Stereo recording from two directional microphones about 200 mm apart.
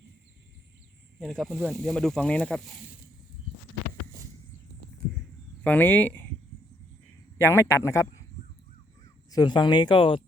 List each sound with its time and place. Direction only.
1.2 s speech: centre (ahead or behind)
5.6 s speech: 5° left (ahead or behind)
7.3 s a man's voice: 10° left (ahead or behind)
9.3 s speech: 20° left (ahead or behind)